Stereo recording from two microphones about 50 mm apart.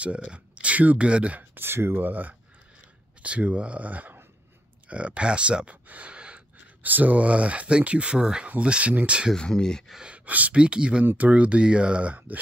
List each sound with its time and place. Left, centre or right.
0.0 s speech: right
1.5 s speech: right
2.0 s speech: right
5.9 s gasp: right
6.8 s speech: right
9.5 s speech: centre
9.9 s speech: right